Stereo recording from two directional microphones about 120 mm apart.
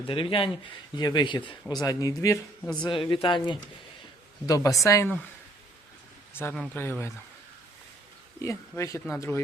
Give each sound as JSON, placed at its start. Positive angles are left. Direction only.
{"t": 0.0, "sound": "speech", "side_deg": 50}
{"t": 1.7, "sound": "speech", "side_deg": 30}
{"t": 2.8, "sound": "speech", "side_deg": 45}
{"t": 4.4, "sound": "speech", "side_deg": 30}
{"t": 6.3, "sound": "speech", "side_deg": 20}
{"t": 8.4, "sound": "speech", "side_deg": 25}